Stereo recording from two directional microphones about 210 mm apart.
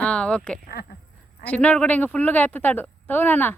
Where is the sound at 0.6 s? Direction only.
45° left (ahead or behind).